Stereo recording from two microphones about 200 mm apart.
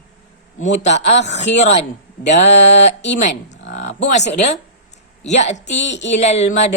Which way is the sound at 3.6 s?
65° left (ahead or behind).